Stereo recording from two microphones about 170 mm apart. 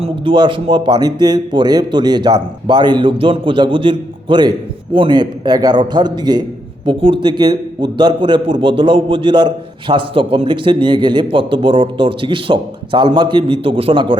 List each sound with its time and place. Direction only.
0.0 s a man's voice: 30° right (ahead or behind)